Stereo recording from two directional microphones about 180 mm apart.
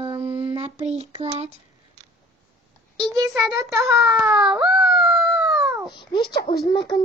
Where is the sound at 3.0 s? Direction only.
20° right (ahead or behind).